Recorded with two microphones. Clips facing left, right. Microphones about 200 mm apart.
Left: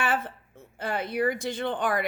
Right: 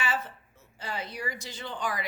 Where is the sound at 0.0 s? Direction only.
55° left (ahead or behind).